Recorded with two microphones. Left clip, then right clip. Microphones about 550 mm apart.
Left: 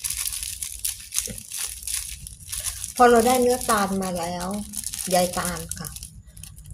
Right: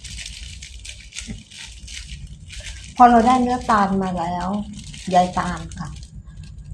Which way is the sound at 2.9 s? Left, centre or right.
Left.